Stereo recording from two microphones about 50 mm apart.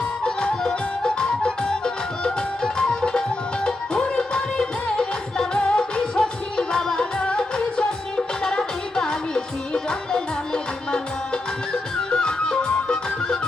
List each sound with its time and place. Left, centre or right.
0.3 s music: centre